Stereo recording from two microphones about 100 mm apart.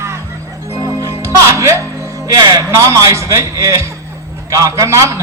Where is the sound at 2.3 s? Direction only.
40° right (ahead or behind).